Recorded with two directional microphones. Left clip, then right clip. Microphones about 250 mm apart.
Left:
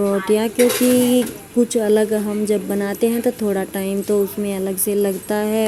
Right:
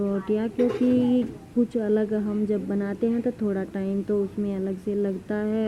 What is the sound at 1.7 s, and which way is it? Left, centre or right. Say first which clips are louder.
Speech: left 9 dB; centre.